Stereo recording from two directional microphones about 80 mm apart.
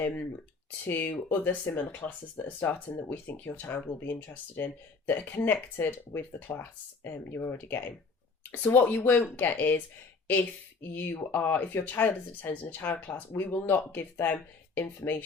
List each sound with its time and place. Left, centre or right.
0.9 s speech: left
5.3 s speech: left
10.9 s speech: left